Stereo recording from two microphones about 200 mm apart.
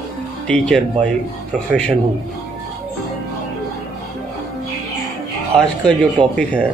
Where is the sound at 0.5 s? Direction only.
5° left (ahead or behind).